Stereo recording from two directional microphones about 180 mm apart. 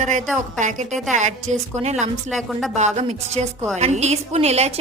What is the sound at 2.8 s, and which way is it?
A woman's voice, 40° right (ahead or behind).